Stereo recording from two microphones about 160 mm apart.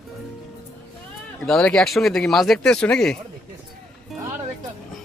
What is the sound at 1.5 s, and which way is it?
Speech, 5° left (ahead or behind).